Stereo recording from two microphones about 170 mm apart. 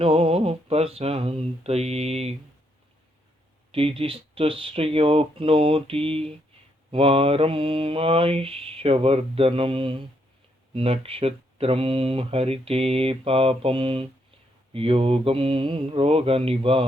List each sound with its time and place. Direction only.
0.0 s speech: 35° right (ahead or behind)
3.7 s speech: 35° right (ahead or behind)